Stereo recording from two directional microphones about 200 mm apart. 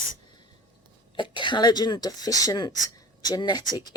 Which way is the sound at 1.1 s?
25° left (ahead or behind).